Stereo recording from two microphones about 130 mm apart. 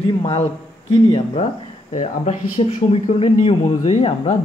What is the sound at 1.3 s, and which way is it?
Speech, 55° left (ahead or behind).